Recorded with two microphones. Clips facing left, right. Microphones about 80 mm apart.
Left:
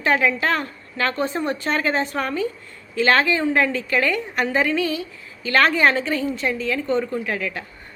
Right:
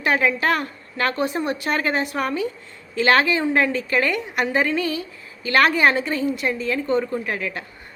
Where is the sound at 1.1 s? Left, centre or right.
Centre.